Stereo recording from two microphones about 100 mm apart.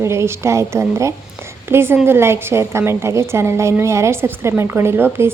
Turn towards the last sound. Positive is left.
turn(degrees=-25)  # may be behind; listen again after turning